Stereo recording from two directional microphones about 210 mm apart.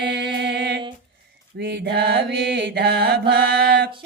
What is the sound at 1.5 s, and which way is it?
Mantra, 50° right (ahead or behind).